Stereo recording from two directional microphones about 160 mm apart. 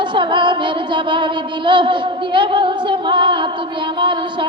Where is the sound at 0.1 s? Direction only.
30° right (ahead or behind).